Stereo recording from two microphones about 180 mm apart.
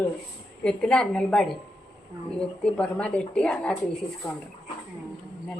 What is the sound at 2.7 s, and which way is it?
Speech, 5° left (ahead or behind).